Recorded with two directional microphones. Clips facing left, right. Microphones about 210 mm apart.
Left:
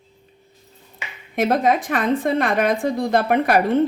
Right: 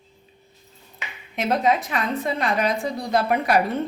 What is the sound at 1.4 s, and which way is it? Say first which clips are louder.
A woman's voice: left 3 dB; 50° left (ahead or behind).